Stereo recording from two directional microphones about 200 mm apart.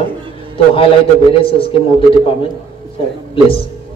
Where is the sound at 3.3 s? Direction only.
25° left (ahead or behind).